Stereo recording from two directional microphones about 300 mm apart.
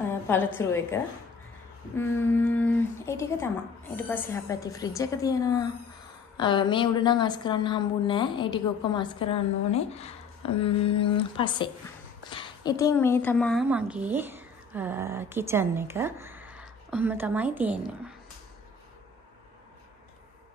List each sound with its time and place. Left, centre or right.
0.1 s a woman's voice: centre